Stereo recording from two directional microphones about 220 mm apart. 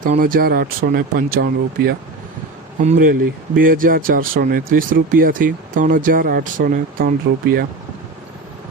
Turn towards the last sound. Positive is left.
turn(degrees=-45)  # may be behind; listen again after turning